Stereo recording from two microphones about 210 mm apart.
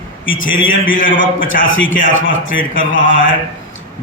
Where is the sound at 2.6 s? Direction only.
40° left (ahead or behind).